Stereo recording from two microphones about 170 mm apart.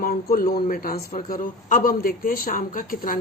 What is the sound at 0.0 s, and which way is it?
Speech, 55° left (ahead or behind).